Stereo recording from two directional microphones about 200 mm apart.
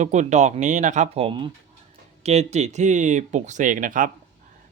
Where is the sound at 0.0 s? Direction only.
35° right (ahead or behind).